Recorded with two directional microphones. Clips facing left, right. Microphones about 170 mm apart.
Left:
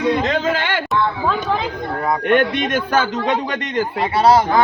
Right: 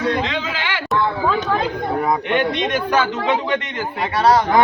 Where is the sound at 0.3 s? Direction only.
45° left (ahead or behind).